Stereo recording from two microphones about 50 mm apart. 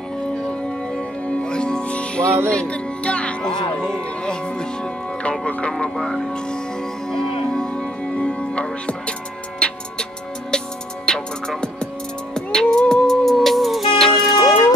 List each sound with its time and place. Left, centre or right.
1.2 s music: centre
6.0 s speech: centre
7.1 s music: centre
11.1 s music: centre